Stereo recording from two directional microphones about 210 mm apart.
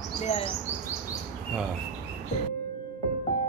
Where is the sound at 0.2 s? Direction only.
30° left (ahead or behind).